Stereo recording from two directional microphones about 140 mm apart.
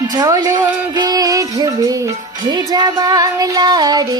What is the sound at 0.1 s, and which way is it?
Music, 25° right (ahead or behind).